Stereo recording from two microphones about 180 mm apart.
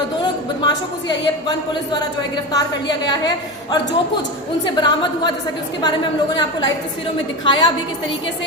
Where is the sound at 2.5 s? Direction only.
25° left (ahead or behind).